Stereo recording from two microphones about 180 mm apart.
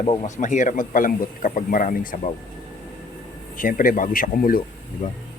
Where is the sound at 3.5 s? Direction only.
50° left (ahead or behind).